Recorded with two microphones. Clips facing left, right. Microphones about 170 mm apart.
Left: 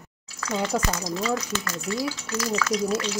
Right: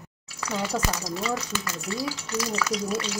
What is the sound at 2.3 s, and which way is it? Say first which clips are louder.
Speech: left 1 dB; 15° right (ahead or behind).